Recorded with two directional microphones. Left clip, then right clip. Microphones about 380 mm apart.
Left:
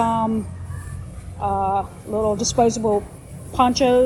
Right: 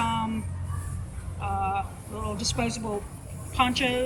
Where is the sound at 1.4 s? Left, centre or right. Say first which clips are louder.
Left 8 dB; right.